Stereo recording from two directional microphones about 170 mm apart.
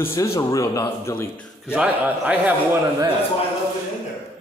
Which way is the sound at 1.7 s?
5° right (ahead or behind).